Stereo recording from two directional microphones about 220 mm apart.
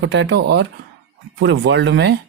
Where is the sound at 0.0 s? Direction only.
55° right (ahead or behind).